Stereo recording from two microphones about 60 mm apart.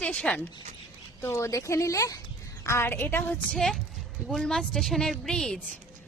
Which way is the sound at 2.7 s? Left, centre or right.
Left.